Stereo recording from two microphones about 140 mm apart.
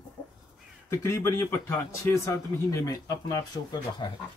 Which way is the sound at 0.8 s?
15° left (ahead or behind).